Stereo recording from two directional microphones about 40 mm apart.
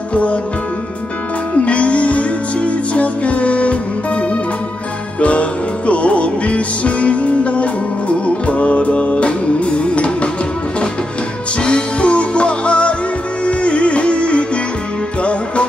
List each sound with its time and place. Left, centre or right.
0.1 s music: left
1.5 s music: left
11.6 s music: left